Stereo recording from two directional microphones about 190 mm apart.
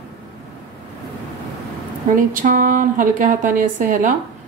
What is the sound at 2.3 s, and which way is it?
A woman's voice, 45° right (ahead or behind).